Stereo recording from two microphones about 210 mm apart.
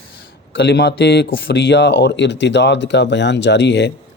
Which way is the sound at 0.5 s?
50° left (ahead or behind).